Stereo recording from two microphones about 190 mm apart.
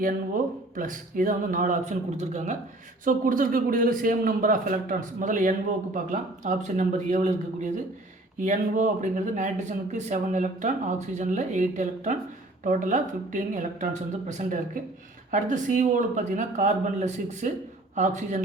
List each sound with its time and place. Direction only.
0.0 s a man's voice: 45° right (ahead or behind)